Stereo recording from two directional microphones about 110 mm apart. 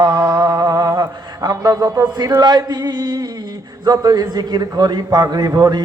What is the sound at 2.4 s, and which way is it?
A man's voice, 40° right (ahead or behind).